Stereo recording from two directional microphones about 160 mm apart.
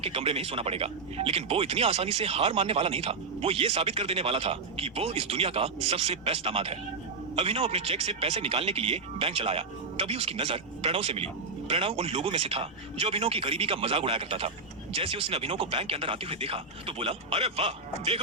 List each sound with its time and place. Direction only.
0.0 s speech: 35° right (ahead or behind)